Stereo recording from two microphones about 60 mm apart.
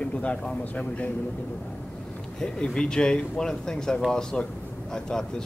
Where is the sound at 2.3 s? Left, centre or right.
Centre.